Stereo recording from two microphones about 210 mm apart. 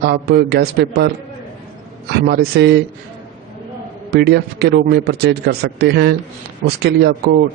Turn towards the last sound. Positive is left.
turn(degrees=-50)  # may be behind; listen again after turning